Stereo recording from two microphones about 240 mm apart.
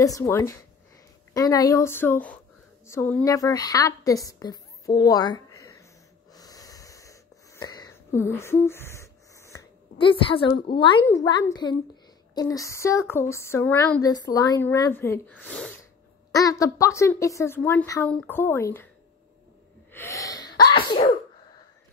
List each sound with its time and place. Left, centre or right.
0.0 s a woman's voice: centre
6.3 s wheeze: centre
10.8 s a woman's voice: centre
19.9 s sneeze: centre